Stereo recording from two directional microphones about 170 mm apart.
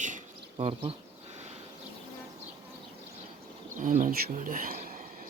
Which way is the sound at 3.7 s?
50° right (ahead or behind).